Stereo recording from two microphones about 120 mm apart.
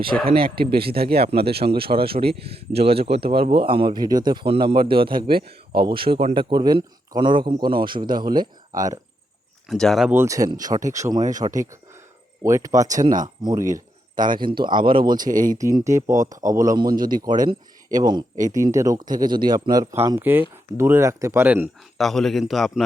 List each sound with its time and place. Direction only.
0.1 s speech: 10° left (ahead or behind)
1.3 s speech: 50° right (ahead or behind); by 9.0 s 30° right (ahead or behind)
9.6 s a man's voice: 5° left (ahead or behind)
10.1 s speech: 25° right (ahead or behind)
20.1 s speech: 15° right (ahead or behind)
21.9 s a man's voice: centre (ahead or behind)